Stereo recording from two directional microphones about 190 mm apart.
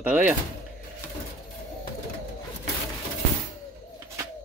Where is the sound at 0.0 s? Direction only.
10° right (ahead or behind).